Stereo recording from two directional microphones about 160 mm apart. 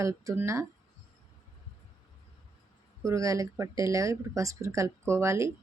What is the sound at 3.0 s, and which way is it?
Speech, 20° right (ahead or behind).